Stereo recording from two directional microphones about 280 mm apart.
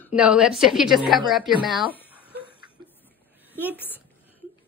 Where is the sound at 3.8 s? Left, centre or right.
Centre.